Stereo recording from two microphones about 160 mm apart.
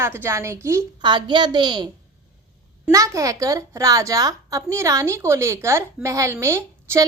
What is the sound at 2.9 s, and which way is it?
A child's voice, 20° right (ahead or behind).